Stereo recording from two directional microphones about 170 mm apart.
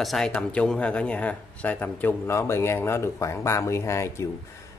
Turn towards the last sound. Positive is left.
turn(degrees=15)  # may be behind; listen again after turning